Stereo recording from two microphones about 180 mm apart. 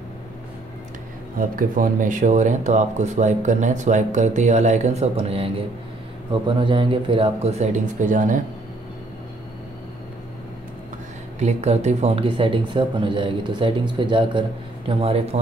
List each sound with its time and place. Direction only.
1.4 s speech: 50° right (ahead or behind)
11.3 s speech: 40° right (ahead or behind)